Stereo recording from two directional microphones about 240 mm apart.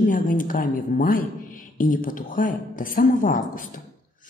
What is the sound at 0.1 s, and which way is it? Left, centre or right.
Speech, left.